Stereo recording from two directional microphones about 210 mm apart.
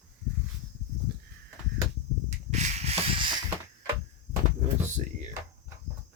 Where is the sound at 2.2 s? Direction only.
30° right (ahead or behind).